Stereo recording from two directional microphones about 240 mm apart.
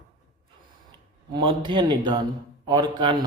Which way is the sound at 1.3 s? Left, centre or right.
Centre.